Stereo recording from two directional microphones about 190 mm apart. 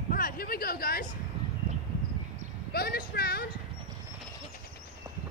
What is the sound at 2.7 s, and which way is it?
Speech, 55° left (ahead or behind).